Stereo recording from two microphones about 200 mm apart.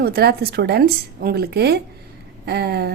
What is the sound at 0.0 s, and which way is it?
A woman's voice, 50° right (ahead or behind).